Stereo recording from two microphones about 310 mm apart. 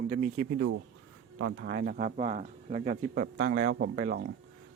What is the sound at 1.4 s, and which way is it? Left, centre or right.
Speech, right.